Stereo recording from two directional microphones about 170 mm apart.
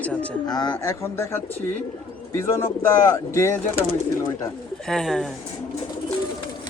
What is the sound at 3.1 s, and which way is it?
Speech, 20° left (ahead or behind).